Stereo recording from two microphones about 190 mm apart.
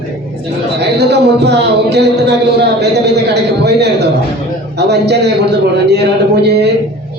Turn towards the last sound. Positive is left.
turn(degrees=-60)  # may be behind; listen again after turning